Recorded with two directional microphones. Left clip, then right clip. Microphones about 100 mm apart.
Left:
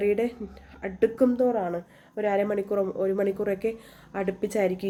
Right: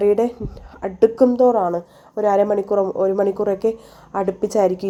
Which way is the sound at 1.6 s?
10° right (ahead or behind).